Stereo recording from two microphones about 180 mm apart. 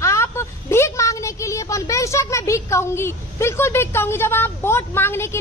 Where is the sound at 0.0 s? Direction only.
15° left (ahead or behind).